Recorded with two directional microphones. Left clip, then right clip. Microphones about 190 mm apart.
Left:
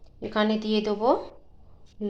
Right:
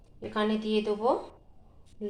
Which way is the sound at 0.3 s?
45° left (ahead or behind).